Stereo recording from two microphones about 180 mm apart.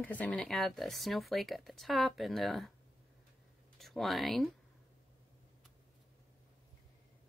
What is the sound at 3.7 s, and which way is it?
Speech, centre (ahead or behind).